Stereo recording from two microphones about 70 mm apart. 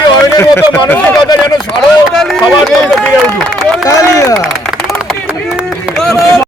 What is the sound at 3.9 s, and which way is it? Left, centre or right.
Speech, left.